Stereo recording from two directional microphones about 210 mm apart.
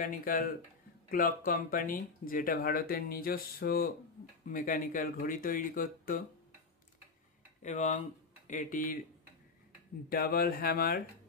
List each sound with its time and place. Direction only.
0.0 s speech: 40° left (ahead or behind)
7.6 s speech: 35° left (ahead or behind)
10.0 s speech: 45° left (ahead or behind)